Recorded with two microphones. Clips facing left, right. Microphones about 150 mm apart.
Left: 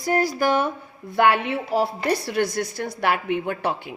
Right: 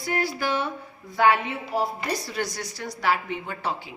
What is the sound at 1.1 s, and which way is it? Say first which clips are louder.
A woman's voice: left 2 dB; 65° left (ahead or behind).